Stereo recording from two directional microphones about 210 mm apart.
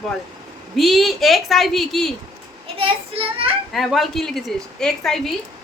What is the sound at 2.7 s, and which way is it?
Speech, 25° right (ahead or behind).